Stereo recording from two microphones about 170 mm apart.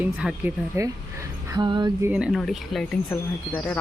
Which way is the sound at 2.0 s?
5° right (ahead or behind).